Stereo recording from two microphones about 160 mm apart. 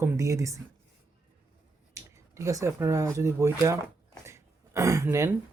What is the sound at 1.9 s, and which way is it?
Speech, 20° right (ahead or behind).